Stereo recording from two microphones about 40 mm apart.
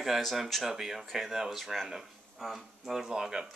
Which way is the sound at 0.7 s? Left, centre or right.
Centre.